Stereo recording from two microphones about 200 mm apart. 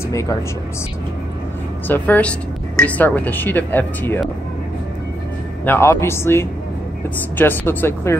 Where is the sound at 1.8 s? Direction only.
10° left (ahead or behind).